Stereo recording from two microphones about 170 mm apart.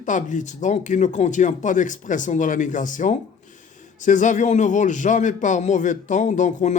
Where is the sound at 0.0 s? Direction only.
50° left (ahead or behind).